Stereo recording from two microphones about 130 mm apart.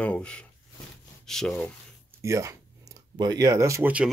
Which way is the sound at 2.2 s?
25° right (ahead or behind).